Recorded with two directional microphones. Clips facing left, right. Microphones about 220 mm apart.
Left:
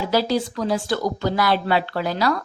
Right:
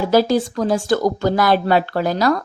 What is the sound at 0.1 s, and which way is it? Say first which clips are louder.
Speech: right 5 dB; 50° right (ahead or behind).